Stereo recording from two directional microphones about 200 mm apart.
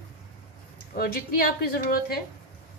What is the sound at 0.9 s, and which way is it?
A woman's voice, 45° left (ahead or behind).